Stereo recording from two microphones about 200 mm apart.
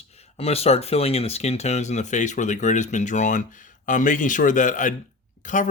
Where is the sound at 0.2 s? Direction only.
30° left (ahead or behind).